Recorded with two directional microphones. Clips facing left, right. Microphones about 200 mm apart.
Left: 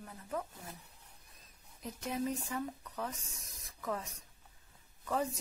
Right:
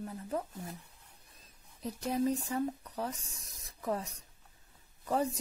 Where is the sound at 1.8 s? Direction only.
35° right (ahead or behind).